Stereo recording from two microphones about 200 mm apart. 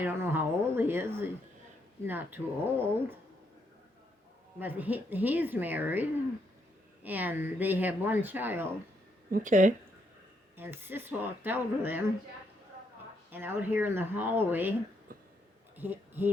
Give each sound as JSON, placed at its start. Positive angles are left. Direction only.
{"t": 0.0, "sound": "speech", "side_deg": -10}
{"t": 4.6, "sound": "speech", "side_deg": -10}
{"t": 9.3, "sound": "speech", "side_deg": -40}
{"t": 10.6, "sound": "speech", "side_deg": -10}
{"t": 13.3, "sound": "speech", "side_deg": -10}
{"t": 15.7, "sound": "a sound", "side_deg": -10}